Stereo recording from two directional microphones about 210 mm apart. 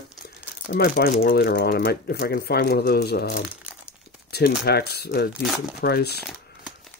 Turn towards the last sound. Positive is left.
turn(degrees=0)  # may be behind; listen again after turning